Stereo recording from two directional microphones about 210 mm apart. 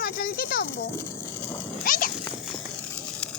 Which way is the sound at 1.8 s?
40° left (ahead or behind).